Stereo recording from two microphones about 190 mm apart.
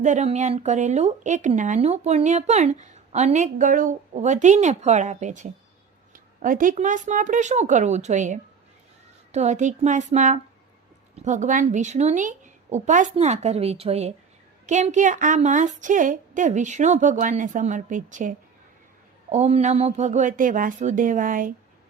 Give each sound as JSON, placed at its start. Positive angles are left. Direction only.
{"t": 0.0, "sound": "a woman's voice", "side_deg": -40}